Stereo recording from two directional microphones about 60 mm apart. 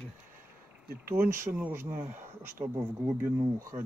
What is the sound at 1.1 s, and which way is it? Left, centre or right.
Speech, right.